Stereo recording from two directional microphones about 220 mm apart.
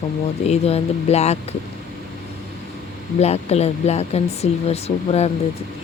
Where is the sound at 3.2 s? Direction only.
30° left (ahead or behind).